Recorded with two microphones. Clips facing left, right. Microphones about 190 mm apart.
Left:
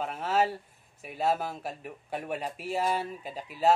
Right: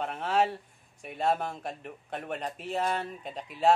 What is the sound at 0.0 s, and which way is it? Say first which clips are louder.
Speech: even; 5° left (ahead or behind).